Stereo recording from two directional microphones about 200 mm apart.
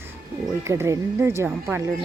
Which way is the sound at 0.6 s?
15° right (ahead or behind).